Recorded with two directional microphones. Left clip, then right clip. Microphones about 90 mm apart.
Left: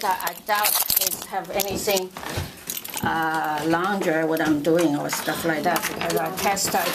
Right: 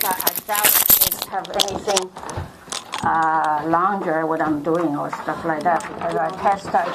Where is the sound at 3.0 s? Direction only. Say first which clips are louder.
Right 5 dB; 65° left (ahead or behind).